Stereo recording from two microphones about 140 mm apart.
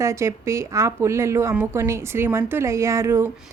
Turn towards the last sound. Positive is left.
turn(degrees=-20)  # may be behind; listen again after turning